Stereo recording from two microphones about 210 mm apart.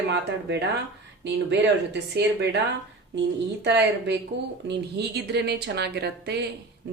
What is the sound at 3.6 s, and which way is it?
A woman's voice, 55° right (ahead or behind).